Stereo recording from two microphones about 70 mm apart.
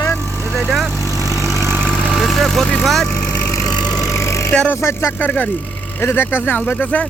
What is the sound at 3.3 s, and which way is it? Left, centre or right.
Wood, left.